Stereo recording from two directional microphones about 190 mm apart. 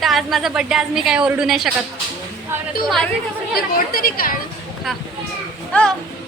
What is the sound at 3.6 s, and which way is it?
Speech, 50° left (ahead or behind).